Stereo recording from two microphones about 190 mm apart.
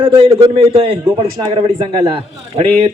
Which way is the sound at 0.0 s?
30° right (ahead or behind).